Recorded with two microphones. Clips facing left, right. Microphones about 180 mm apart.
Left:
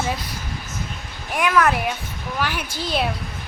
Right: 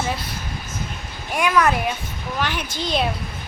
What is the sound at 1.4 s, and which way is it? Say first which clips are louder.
Speech: even; 5° left (ahead or behind).